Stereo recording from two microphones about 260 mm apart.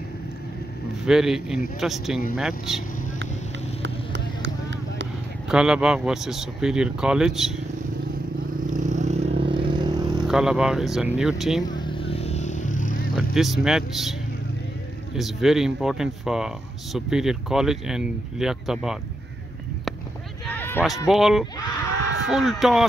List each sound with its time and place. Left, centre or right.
1.0 s speech: centre
3.8 s vehicle: right
5.5 s speech: centre
8.6 s vehicle: right
10.2 s speech: centre
11.6 s vehicle: centre
13.1 s speech: centre
15.1 s speech: centre
20.4 s a sound: centre
21.1 s speech: centre